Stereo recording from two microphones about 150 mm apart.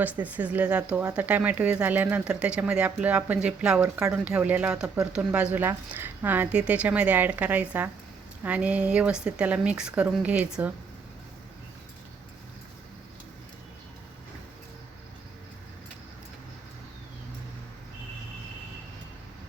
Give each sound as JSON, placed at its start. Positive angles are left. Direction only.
{"t": 0.0, "sound": "speech", "side_deg": -10}